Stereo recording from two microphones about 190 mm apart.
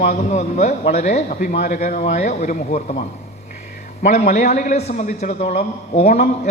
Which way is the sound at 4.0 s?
40° left (ahead or behind).